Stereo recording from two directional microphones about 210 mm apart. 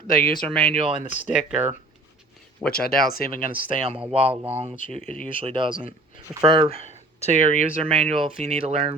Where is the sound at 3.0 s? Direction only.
45° left (ahead or behind).